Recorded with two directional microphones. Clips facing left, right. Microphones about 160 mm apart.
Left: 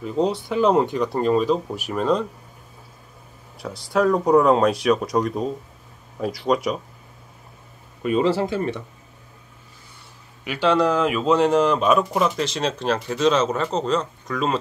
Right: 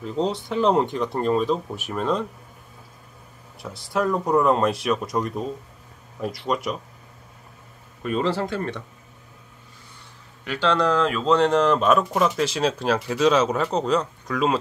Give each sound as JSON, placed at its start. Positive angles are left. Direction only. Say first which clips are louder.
{"t": 0.0, "sound": "speech", "louder": "left 3 dB", "side_deg": 5}
{"t": 3.7, "sound": "speech", "louder": "left 4 dB", "side_deg": 0}
{"t": 5.1, "sound": "speech", "louder": "left 4 dB", "side_deg": 20}
{"t": 6.5, "sound": "speech", "louder": "left 5 dB", "side_deg": 0}
{"t": 8.0, "sound": "speech", "louder": "left 4 dB", "side_deg": 5}
{"t": 10.4, "sound": "speech", "louder": "left 3 dB", "side_deg": 10}